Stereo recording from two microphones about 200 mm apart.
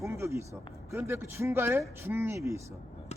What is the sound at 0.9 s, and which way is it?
Speech, 15° right (ahead or behind).